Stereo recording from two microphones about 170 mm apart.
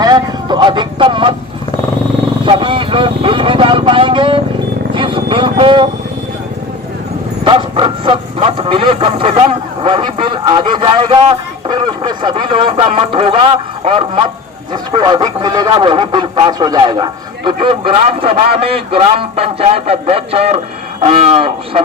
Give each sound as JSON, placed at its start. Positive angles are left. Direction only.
{"t": 0.0, "sound": "vehicle", "side_deg": -25}
{"t": 2.5, "sound": "vehicle", "side_deg": -30}
{"t": 7.4, "sound": "bow-wow", "side_deg": -30}
{"t": 11.7, "sound": "speech", "side_deg": -25}